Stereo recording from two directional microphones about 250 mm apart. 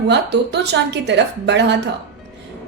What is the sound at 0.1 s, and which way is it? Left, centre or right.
A woman's voice, right.